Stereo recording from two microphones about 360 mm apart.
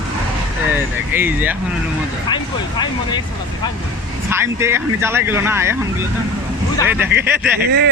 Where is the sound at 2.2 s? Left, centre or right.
Centre.